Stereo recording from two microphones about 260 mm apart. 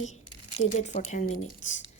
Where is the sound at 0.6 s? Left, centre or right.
Left.